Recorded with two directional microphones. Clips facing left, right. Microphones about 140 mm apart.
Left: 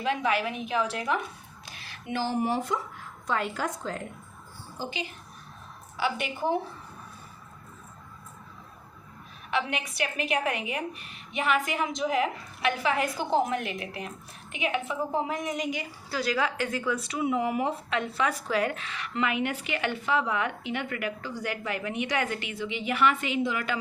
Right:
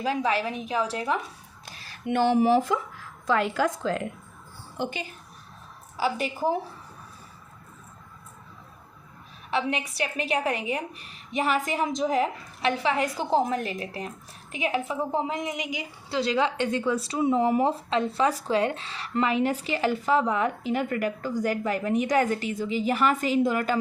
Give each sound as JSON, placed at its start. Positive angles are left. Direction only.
{"t": 0.0, "sound": "speech", "side_deg": -35}
{"t": 1.7, "sound": "a sound", "side_deg": -40}
{"t": 2.0, "sound": "a woman's voice", "side_deg": -65}
{"t": 4.8, "sound": "a woman's voice", "side_deg": -50}
{"t": 6.0, "sound": "speech", "side_deg": -35}
{"t": 9.5, "sound": "speech", "side_deg": -30}
{"t": 15.3, "sound": "a woman's voice", "side_deg": -15}
{"t": 16.0, "sound": "speech", "side_deg": -25}